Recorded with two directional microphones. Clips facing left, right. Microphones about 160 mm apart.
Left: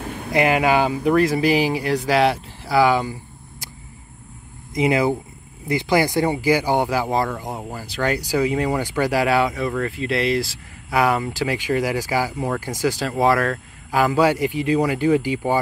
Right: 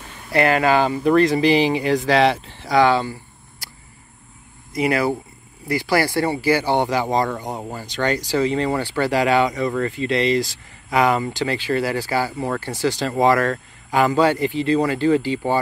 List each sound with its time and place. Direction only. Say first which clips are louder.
0.0 s a sound: left 10 dB; 65° left (ahead or behind)
0.3 s speech: right 1 dB; 15° left (ahead or behind)
4.7 s speech: left 1 dB; 20° left (ahead or behind)